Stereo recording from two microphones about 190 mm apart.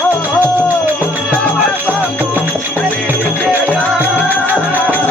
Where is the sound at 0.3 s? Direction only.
10° right (ahead or behind).